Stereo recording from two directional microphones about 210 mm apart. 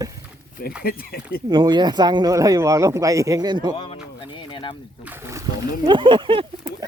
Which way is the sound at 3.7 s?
25° left (ahead or behind).